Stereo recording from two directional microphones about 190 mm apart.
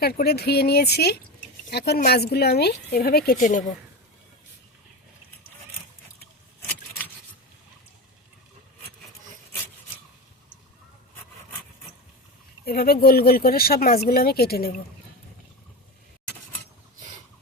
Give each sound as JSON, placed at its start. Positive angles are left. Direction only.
{"t": 0.0, "sound": "speech", "side_deg": 55}
{"t": 12.6, "sound": "speech", "side_deg": 55}